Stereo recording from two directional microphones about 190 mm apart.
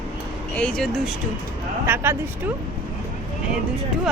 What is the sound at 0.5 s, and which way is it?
Speech, 5° left (ahead or behind).